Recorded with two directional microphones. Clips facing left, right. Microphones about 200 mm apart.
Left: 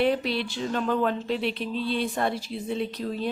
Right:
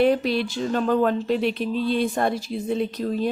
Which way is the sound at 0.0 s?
45° right (ahead or behind).